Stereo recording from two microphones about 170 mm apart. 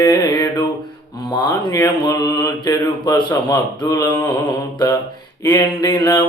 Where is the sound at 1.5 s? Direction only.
20° left (ahead or behind).